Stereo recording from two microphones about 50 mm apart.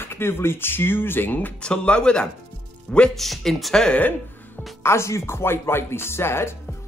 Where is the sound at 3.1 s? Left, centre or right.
Centre.